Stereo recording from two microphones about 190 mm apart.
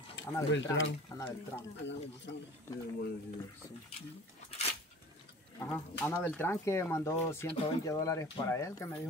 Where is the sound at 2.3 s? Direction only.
70° left (ahead or behind).